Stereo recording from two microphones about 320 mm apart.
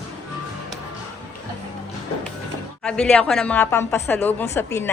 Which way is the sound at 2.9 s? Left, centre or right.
Centre.